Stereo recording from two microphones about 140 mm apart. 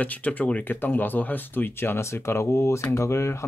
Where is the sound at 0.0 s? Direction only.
10° left (ahead or behind).